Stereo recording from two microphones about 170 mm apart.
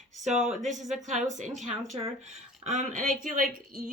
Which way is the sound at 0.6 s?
45° right (ahead or behind).